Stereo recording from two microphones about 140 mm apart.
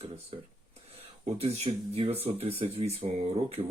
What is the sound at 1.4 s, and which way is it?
Speech, 45° right (ahead or behind).